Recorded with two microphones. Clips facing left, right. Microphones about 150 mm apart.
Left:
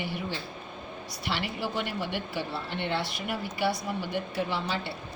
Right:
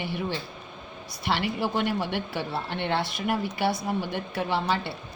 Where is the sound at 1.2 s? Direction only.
55° right (ahead or behind).